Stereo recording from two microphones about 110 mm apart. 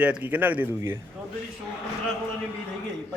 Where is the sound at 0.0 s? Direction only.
15° right (ahead or behind).